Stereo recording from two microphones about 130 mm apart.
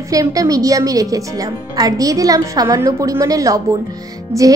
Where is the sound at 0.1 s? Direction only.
25° right (ahead or behind).